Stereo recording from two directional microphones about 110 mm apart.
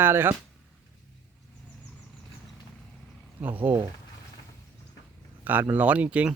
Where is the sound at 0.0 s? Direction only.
20° right (ahead or behind).